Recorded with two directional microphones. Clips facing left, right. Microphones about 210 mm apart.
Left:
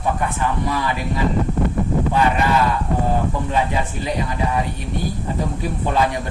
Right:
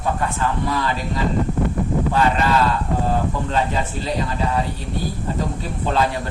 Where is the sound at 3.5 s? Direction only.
15° left (ahead or behind).